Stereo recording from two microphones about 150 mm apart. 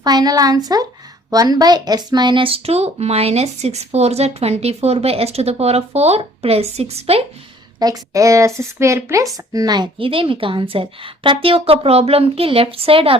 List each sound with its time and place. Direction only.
0.0 s speech: 25° right (ahead or behind); by 7.3 s 45° right (ahead or behind)
7.8 s speech: 25° right (ahead or behind)